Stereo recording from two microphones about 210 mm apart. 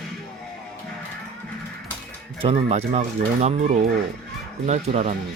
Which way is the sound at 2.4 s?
30° right (ahead or behind).